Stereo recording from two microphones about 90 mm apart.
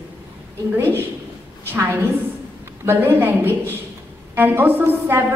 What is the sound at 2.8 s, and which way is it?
A woman's voice, 25° right (ahead or behind).